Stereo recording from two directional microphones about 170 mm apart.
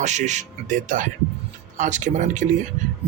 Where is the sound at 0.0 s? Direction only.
45° right (ahead or behind).